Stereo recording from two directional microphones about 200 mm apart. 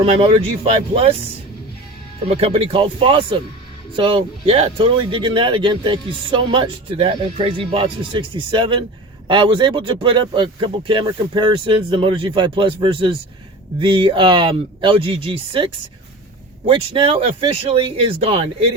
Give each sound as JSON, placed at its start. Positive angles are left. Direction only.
{"t": 0.0, "sound": "speech", "side_deg": -30}
{"t": 2.1, "sound": "speech", "side_deg": -30}